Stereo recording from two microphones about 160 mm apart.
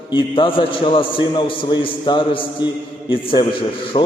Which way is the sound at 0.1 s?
35° left (ahead or behind).